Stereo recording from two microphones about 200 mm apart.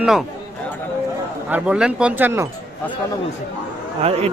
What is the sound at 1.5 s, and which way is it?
Speech, 5° right (ahead or behind).